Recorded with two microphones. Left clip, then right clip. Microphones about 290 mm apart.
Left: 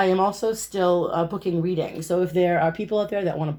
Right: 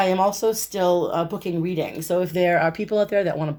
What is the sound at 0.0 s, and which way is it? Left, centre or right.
Speech, right.